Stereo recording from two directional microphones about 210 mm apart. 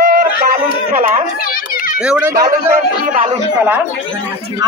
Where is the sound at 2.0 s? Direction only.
5° right (ahead or behind).